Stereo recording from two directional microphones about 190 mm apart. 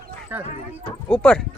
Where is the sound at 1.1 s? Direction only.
5° left (ahead or behind).